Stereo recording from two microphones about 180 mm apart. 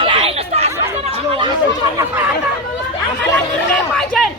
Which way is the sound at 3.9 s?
5° left (ahead or behind).